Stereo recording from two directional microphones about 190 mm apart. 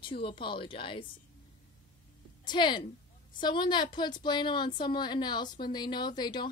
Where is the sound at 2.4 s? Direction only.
25° left (ahead or behind).